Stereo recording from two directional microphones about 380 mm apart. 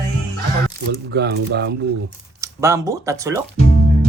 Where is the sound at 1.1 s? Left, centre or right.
Right.